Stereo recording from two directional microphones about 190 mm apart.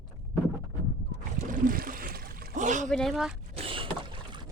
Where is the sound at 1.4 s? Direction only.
45° right (ahead or behind).